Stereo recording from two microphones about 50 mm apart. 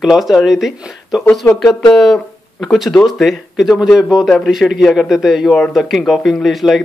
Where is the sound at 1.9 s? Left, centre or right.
Centre.